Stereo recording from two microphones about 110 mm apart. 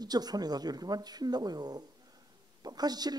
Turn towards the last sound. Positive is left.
turn(degrees=-35)  # may be behind; listen again after turning